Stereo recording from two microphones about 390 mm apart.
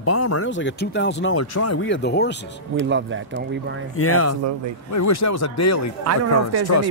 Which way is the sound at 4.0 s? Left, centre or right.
Left.